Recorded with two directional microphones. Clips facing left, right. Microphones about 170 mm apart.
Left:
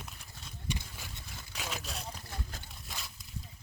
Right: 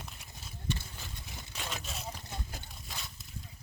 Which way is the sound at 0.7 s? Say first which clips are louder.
Right 2 dB; 10° left (ahead or behind).